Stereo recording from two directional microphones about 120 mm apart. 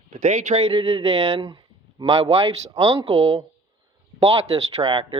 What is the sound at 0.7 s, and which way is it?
Speech, 50° right (ahead or behind).